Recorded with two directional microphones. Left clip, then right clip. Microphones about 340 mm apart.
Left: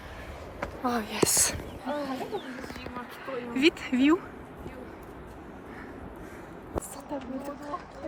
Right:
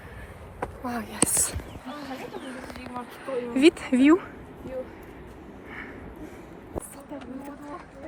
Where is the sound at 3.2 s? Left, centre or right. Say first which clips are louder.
Right 5 dB; centre.